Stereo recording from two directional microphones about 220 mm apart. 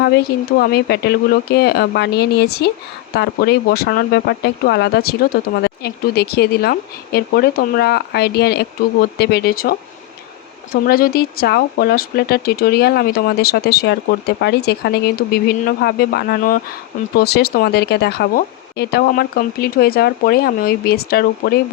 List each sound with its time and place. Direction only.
0.6 s speech: 45° left (ahead or behind)
10.8 s speech: 45° left (ahead or behind)